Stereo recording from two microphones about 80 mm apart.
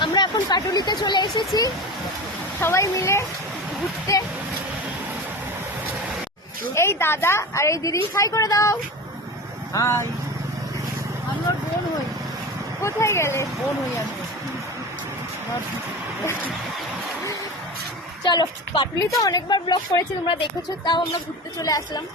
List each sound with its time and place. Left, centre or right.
0.0 s speech: left
2.6 s a woman's voice: left
6.7 s a woman's voice: left
12.8 s a woman's voice: left
18.3 s a woman's voice: left
18.9 s a woman's voice: left
20.2 s speech: left
21.6 s a woman's voice: left